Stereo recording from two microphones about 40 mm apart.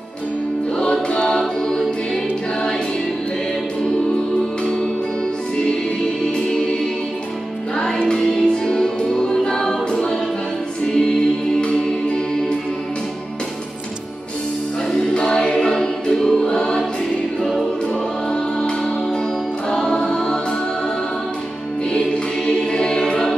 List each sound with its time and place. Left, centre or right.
0.7 s music: left
8.2 s music: centre
15.2 s choir: centre
17.4 s music: centre
19.7 s music: centre
22.5 s music: centre